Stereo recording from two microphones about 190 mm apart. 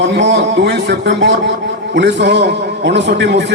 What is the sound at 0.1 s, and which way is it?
A man's voice, 65° right (ahead or behind).